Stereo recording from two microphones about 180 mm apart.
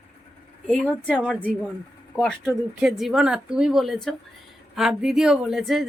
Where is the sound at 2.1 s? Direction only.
5° left (ahead or behind).